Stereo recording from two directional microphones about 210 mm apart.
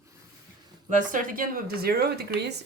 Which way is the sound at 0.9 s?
35° right (ahead or behind).